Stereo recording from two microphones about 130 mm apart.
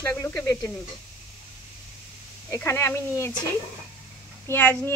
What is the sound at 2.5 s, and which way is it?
Speech, 20° left (ahead or behind).